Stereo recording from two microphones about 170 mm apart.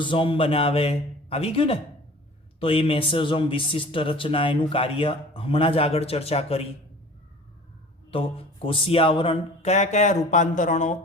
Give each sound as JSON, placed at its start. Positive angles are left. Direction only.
{"t": 0.0, "sound": "speech", "side_deg": 30}
{"t": 8.1, "sound": "speech", "side_deg": 30}